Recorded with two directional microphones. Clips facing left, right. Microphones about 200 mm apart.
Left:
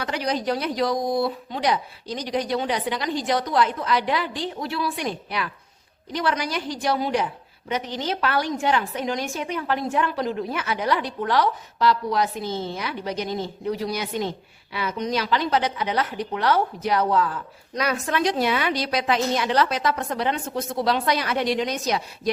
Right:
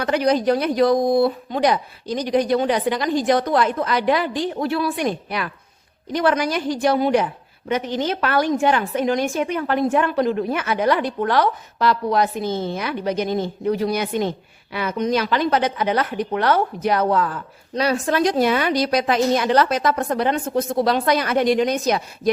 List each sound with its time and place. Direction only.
0.0 s a woman's voice: 55° right (ahead or behind)
17.7 s a woman's voice: 30° right (ahead or behind)
18.2 s a woman's voice: 45° right (ahead or behind)